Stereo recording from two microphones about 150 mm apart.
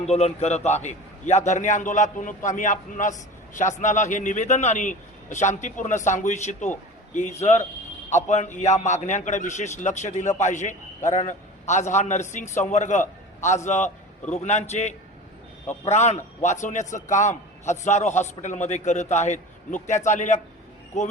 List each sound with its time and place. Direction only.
0.0 s a man's voice: 45° left (ahead or behind)